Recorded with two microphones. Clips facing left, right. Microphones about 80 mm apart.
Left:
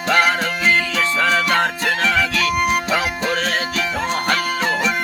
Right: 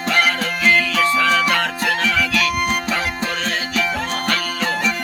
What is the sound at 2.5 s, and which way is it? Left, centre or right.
Music, centre.